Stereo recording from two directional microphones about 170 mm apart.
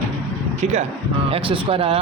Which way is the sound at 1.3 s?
30° right (ahead or behind).